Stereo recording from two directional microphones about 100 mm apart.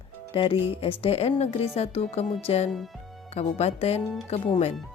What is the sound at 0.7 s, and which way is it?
Speech, 75° left (ahead or behind).